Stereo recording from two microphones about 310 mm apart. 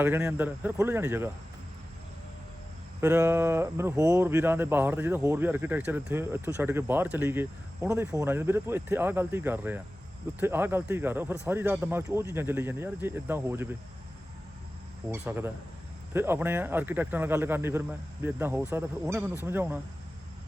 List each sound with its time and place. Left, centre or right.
0.0 s speech: centre
3.0 s speech: centre
15.1 s speech: centre